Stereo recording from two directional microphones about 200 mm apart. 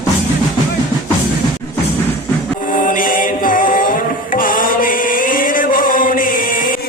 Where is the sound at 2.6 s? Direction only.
45° left (ahead or behind).